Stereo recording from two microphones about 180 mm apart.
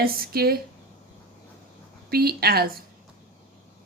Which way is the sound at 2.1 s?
60° right (ahead or behind).